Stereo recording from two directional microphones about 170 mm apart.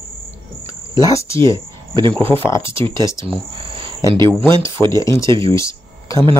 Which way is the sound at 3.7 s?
30° right (ahead or behind).